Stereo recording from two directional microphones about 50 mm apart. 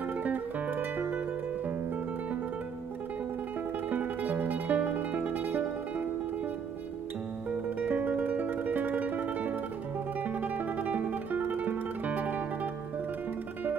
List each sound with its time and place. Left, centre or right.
0.2 s music: right
3.9 s music: right
7.8 s music: right